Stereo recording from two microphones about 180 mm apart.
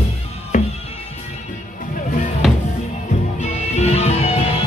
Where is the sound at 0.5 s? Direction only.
45° left (ahead or behind).